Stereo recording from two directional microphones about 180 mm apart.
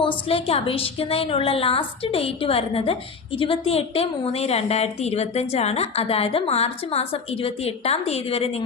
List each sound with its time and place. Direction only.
0.3 s a woman's voice: 30° left (ahead or behind)